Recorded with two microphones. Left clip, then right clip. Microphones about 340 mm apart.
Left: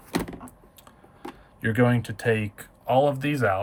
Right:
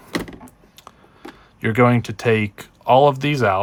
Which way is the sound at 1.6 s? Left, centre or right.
Centre.